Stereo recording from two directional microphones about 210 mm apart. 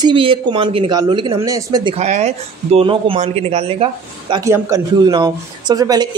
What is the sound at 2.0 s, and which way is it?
Speech, 30° right (ahead or behind).